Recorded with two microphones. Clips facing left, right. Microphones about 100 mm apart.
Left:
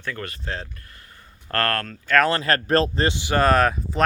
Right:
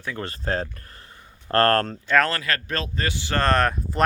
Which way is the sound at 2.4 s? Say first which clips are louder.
Left 8 dB; 40° left (ahead or behind).